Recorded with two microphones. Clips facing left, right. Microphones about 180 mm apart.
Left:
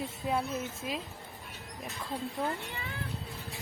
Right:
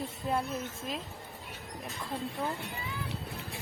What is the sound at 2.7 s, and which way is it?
Speech, 70° left (ahead or behind).